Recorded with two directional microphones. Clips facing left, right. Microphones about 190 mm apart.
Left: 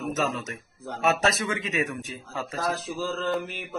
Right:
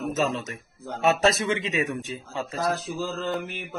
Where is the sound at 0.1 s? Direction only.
30° right (ahead or behind).